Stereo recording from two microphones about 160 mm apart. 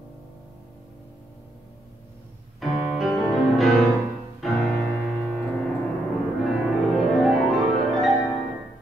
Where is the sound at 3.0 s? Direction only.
Centre (ahead or behind).